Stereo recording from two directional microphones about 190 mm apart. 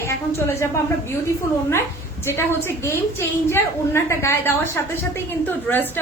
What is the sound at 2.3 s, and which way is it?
A woman's voice, 15° left (ahead or behind).